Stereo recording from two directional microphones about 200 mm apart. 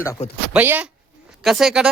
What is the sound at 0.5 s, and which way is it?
A woman's voice, 10° right (ahead or behind).